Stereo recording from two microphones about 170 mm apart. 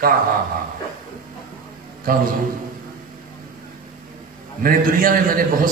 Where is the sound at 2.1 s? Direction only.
55° right (ahead or behind).